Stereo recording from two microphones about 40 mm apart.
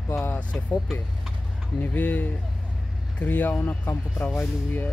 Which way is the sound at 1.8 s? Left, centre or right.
Left.